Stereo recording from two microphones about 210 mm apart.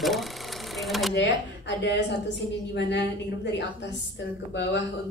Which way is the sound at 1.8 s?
55° left (ahead or behind).